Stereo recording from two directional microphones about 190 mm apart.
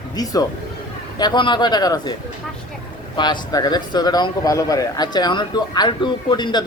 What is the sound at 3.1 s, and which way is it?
A man's voice, 25° left (ahead or behind).